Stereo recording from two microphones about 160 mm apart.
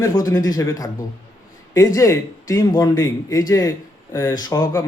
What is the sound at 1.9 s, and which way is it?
Speech, 20° left (ahead or behind).